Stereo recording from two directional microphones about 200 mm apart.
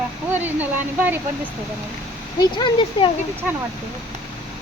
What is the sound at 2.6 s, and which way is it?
Speech, 25° left (ahead or behind).